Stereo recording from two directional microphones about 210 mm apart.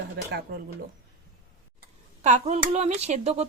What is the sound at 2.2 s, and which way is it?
Speech, 35° right (ahead or behind).